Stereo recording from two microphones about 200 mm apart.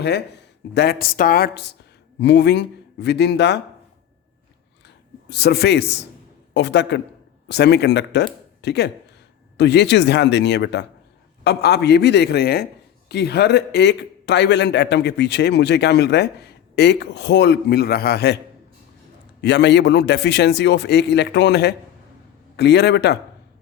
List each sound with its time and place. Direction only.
0.7 s a woman's voice: 55° left (ahead or behind)
5.3 s a man's voice: 55° left (ahead or behind)
19.4 s a man's voice: 60° left (ahead or behind)